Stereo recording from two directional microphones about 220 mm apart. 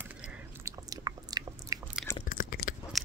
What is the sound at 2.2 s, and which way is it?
Chewing, 40° left (ahead or behind).